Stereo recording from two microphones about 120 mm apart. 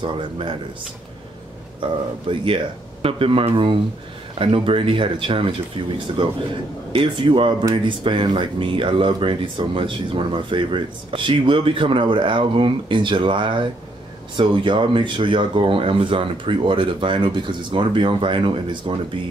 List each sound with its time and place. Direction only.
0.0 s speech: 45° right (ahead or behind)
1.8 s speech: 45° right (ahead or behind)